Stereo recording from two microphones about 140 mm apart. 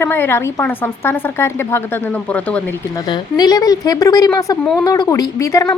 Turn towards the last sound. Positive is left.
turn(degrees=25)  # may be behind; listen again after turning